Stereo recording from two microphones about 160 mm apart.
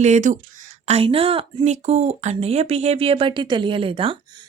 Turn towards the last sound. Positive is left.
turn(degrees=-35)  # may be behind; listen again after turning